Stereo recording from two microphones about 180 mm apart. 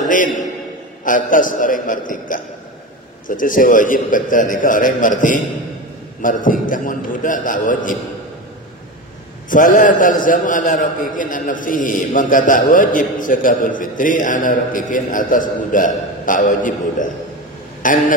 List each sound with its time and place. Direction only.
0.0 s a sound: 45° left (ahead or behind)
1.0 s a man's voice: 50° left (ahead or behind)
9.5 s a man's voice: 50° left (ahead or behind)